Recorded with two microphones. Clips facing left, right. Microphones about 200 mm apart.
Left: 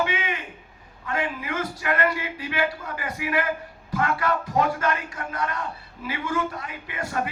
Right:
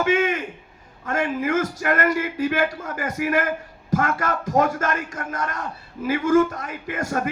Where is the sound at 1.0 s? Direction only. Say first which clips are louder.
Right 6 dB; 45° right (ahead or behind).